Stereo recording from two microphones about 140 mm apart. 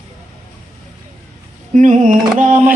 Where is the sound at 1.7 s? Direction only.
65° right (ahead or behind).